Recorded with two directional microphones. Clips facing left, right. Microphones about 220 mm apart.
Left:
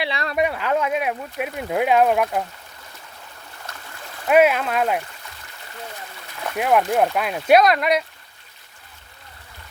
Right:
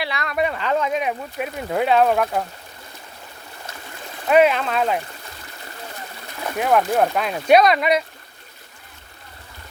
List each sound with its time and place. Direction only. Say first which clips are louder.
0.0 s speech: left 1 dB; 30° left (ahead or behind)
0.3 s speech: even; 10° left (ahead or behind)
3.7 s stream: right 2 dB; 5° right (ahead or behind)
4.3 s speech: even; 5° left (ahead or behind)
6.6 s speech: even; 5° left (ahead or behind)